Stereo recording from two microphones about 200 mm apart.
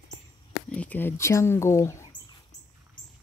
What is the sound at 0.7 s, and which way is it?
Speech, 5° left (ahead or behind).